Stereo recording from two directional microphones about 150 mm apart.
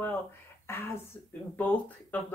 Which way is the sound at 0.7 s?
15° left (ahead or behind).